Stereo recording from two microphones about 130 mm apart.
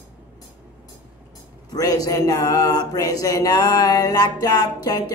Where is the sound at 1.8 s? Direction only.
25° left (ahead or behind).